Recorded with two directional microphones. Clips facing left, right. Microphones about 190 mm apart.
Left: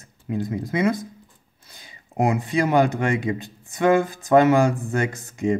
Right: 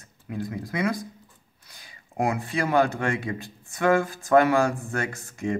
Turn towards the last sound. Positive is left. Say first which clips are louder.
# left 6 dB
turn(degrees=20)  # may be behind; listen again after turning